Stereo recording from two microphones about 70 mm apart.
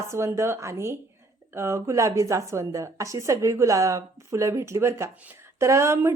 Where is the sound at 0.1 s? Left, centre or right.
Right.